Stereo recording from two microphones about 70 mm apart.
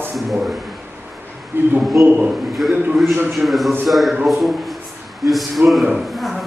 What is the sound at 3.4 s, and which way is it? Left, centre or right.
A man's voice, centre.